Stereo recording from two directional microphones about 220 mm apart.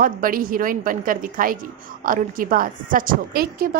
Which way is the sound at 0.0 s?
40° right (ahead or behind).